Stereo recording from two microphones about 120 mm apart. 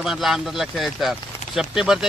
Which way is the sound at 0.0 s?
5° right (ahead or behind).